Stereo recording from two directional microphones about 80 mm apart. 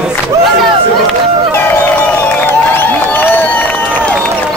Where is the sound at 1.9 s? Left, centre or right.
Left.